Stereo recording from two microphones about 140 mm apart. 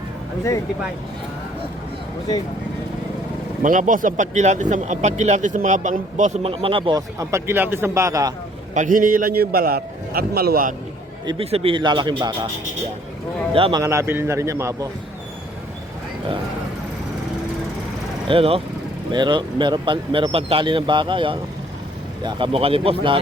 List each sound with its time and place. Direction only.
3.6 s speech: 70° right (ahead or behind)
6.4 s speech: 40° right (ahead or behind)
7.2 s a man's voice: 20° right (ahead or behind)
8.7 s a man's voice: 70° right (ahead or behind); by 10.8 s 85° right
11.3 s speech: 40° right (ahead or behind)
13.5 s speech: 40° right (ahead or behind)
13.7 s a man's voice: 20° right (ahead or behind)
18.3 s speech: 40° right (ahead or behind)
22.5 s speech: 40° right (ahead or behind)